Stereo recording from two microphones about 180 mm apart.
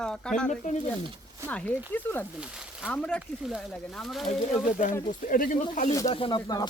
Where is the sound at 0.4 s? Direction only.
45° left (ahead or behind).